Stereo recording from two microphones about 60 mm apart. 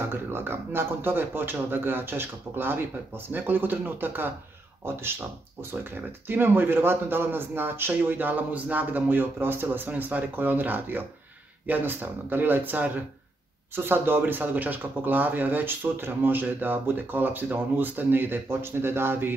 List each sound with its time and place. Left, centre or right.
0.1 s speech: right
6.2 s speech: right